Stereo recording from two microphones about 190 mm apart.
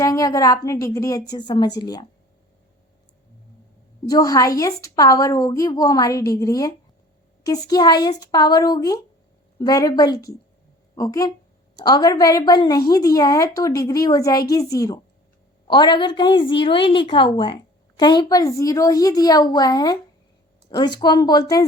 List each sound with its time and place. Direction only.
0.0 s a woman's voice: 20° left (ahead or behind)
4.0 s a woman's voice: 20° left (ahead or behind)